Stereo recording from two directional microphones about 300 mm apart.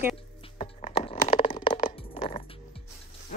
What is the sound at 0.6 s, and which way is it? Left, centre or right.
Crushing, centre.